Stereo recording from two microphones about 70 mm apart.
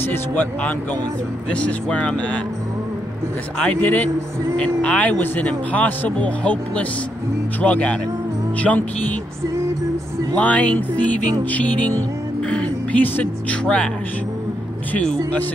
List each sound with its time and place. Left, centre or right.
0.0 s speech: left
3.5 s speech: centre
10.3 s speech: centre